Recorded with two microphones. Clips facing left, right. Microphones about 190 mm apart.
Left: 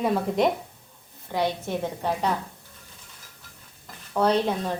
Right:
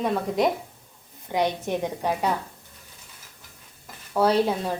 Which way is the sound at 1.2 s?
20° right (ahead or behind).